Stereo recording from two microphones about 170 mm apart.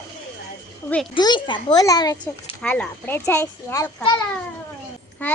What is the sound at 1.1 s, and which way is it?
A child's voice, 25° left (ahead or behind).